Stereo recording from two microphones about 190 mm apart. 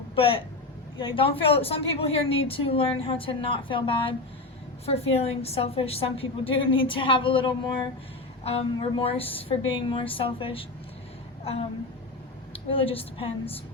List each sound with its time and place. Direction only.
0.2 s a woman's voice: 30° left (ahead or behind)
12.5 s speech: 30° left (ahead or behind)